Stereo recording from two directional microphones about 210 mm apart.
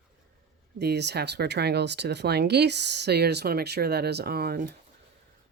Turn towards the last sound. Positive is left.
turn(degrees=-45)  # may be behind; listen again after turning